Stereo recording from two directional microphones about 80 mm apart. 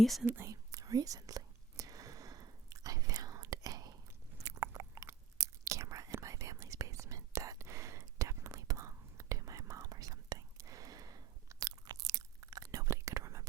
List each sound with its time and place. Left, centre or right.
0.0 s speech: centre
0.4 s whispering: right
4.4 s biting: right
5.4 s whispering: right